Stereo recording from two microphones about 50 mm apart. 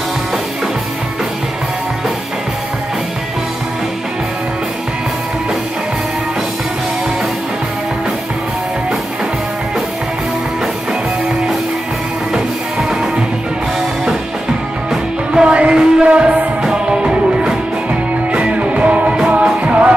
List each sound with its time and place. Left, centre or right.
15.3 s music: right